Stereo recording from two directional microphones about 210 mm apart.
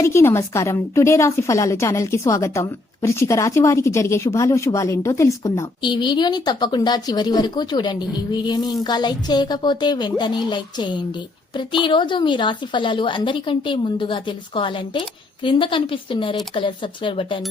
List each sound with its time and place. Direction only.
0.0 s a woman's voice: 10° left (ahead or behind)